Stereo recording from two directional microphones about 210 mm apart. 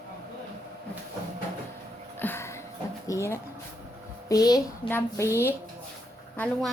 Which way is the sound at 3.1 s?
15° left (ahead or behind).